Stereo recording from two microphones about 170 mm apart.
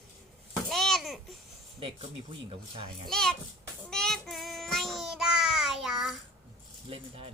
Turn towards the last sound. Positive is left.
turn(degrees=-35)  # may be behind; listen again after turning